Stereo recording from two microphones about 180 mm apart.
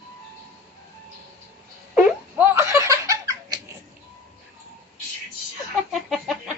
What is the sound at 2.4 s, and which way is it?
Laughter, 15° right (ahead or behind).